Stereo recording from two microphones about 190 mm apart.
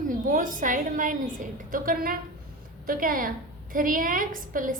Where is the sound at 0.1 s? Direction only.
45° right (ahead or behind).